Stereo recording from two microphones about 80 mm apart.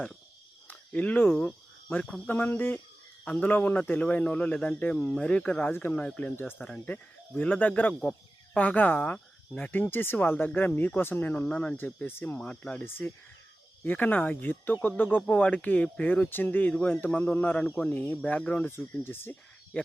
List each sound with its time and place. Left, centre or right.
0.7 s speech: centre
5.7 s speech: left
6.0 s speech: centre
6.6 s speech: centre
12.4 s speech: centre
12.8 s speech: left
19.7 s speech: centre